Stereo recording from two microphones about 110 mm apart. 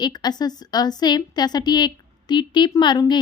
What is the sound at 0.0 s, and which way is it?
Speech, 40° left (ahead or behind).